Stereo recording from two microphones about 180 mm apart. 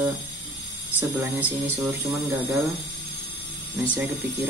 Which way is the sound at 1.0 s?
10° right (ahead or behind).